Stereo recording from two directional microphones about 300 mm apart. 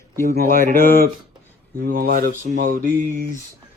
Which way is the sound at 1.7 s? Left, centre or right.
Right.